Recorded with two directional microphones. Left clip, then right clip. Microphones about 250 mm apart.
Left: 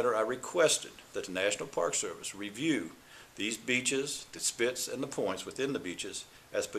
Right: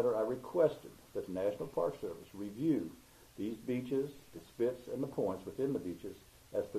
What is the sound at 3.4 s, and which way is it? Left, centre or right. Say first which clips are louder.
Speech: left 7 dB; centre.